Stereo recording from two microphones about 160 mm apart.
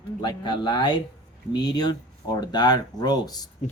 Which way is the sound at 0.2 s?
25° left (ahead or behind).